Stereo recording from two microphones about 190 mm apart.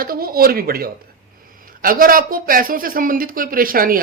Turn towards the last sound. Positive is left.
turn(degrees=-50)  # may be behind; listen again after turning